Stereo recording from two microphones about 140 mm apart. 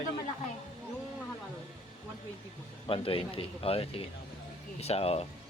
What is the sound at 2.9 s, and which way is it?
A man's voice, 40° left (ahead or behind).